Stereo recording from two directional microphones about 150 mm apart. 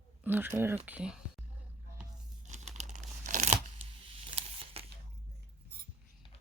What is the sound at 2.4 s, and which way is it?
Tearing, 50° right (ahead or behind).